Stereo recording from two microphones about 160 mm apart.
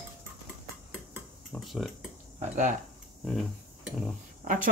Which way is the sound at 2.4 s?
50° right (ahead or behind).